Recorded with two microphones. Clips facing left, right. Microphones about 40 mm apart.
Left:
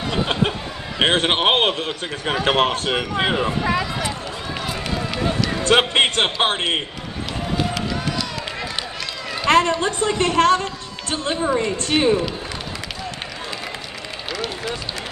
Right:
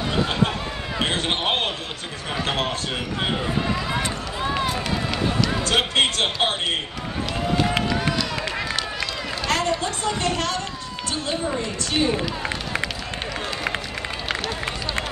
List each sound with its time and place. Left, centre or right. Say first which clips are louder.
0.9 s a woman's voice: left 6 dB; left
3.2 s speech: left 2 dB; left
5.6 s a woman's voice: left 6 dB; left
9.5 s a woman's voice: left 7 dB; left